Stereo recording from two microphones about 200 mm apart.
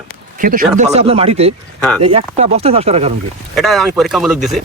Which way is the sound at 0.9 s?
30° right (ahead or behind).